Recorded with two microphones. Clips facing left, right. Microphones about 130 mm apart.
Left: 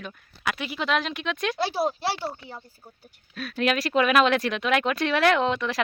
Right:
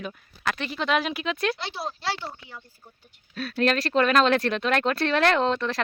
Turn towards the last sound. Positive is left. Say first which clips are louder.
# even
turn(degrees=5)  # may be behind; listen again after turning